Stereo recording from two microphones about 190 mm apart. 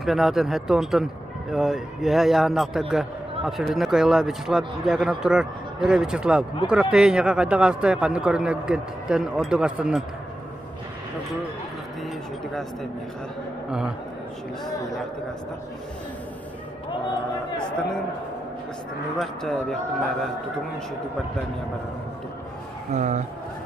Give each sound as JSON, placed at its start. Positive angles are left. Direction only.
{"t": 0.0, "sound": "a man's voice", "side_deg": 0}
{"t": 13.7, "sound": "a man's voice", "side_deg": -5}
{"t": 19.1, "sound": "a man's voice", "side_deg": 0}
{"t": 22.9, "sound": "speech", "side_deg": -40}